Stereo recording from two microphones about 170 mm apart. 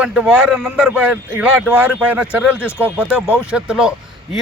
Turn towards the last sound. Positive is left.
turn(degrees=-5)  # may be behind; listen again after turning